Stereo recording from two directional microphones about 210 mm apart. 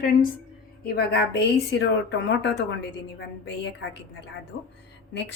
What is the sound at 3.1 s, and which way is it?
A woman's voice, 55° left (ahead or behind).